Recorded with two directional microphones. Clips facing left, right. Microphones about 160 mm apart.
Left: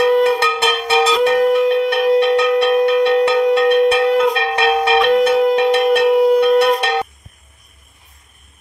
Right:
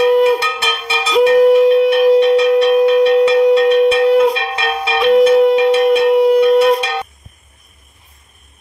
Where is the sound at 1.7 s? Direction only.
Centre (ahead or behind).